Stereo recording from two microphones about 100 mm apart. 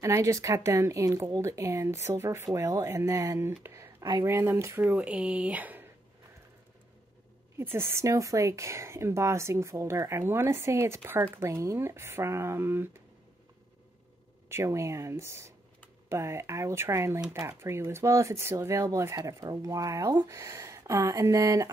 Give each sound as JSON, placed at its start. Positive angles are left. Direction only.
{"t": 0.0, "sound": "speech", "side_deg": -30}
{"t": 3.6, "sound": "a sound", "side_deg": -30}
{"t": 4.2, "sound": "speech", "side_deg": -30}
{"t": 4.8, "sound": "speech", "side_deg": -15}
{"t": 7.5, "sound": "speech", "side_deg": -25}
{"t": 14.5, "sound": "speech", "side_deg": -30}